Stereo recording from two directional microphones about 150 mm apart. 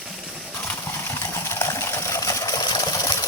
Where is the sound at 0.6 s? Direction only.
15° left (ahead or behind).